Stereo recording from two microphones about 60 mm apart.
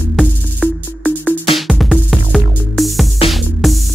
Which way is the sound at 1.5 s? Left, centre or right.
Centre.